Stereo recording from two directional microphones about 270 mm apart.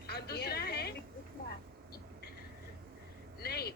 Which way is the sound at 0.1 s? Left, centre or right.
Left.